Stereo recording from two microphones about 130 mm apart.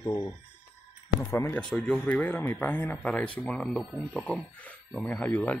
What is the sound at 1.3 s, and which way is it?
Speech, 20° left (ahead or behind).